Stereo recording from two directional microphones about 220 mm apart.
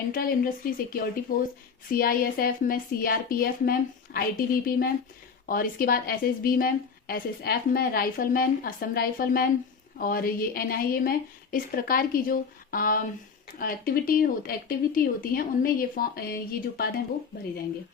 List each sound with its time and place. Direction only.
0.1 s a woman's voice: 40° left (ahead or behind)